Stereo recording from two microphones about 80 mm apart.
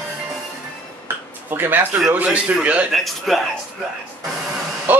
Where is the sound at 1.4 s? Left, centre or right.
Right.